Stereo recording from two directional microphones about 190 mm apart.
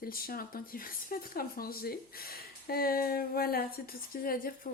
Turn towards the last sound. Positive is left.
turn(degrees=50)  # may be behind; listen again after turning